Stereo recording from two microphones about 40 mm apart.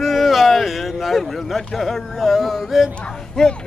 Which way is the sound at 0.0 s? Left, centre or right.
Centre.